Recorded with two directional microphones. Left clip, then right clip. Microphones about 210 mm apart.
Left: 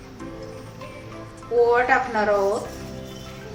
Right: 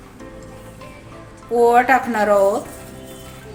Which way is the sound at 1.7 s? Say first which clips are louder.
Right 5 dB; 55° right (ahead or behind).